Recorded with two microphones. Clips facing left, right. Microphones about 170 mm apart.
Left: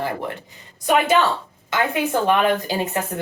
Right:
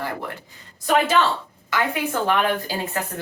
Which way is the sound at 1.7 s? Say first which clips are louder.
Left 3 dB; 20° left (ahead or behind).